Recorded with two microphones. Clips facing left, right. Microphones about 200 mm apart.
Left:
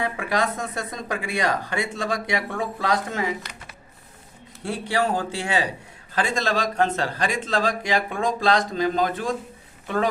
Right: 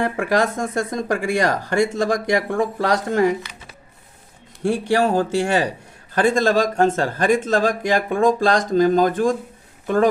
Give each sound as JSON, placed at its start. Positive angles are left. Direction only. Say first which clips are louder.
{"t": 0.0, "sound": "speech", "louder": "right 5 dB", "side_deg": -45}
{"t": 4.6, "sound": "speech", "louder": "right 6 dB", "side_deg": -45}